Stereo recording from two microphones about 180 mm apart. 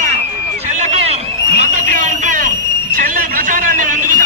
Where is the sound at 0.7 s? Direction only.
35° right (ahead or behind).